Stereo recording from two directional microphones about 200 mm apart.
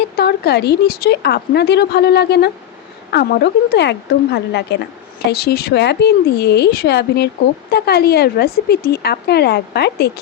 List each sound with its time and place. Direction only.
0.2 s speech: 55° left (ahead or behind)